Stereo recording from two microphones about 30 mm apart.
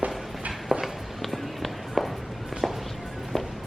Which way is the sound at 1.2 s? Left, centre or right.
Centre.